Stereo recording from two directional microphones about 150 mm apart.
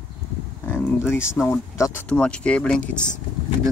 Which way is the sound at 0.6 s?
10° left (ahead or behind).